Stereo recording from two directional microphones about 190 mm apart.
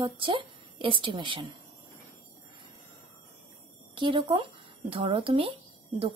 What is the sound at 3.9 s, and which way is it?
A woman's voice, 25° right (ahead or behind).